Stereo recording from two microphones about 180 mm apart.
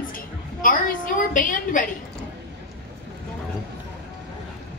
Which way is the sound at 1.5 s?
50° left (ahead or behind).